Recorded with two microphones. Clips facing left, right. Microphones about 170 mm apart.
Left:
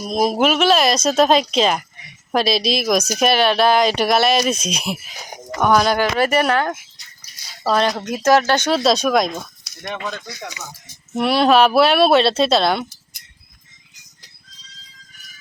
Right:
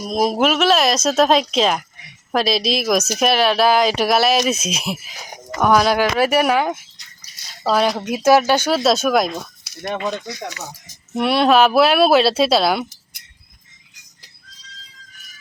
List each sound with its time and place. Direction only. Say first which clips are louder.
0.0 s speech: even; centre (ahead or behind)
10.0 s speech: right 5 dB; 20° right (ahead or behind)
11.1 s speech: even; centre (ahead or behind)